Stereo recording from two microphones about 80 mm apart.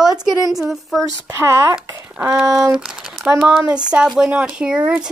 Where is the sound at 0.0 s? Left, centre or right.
Centre.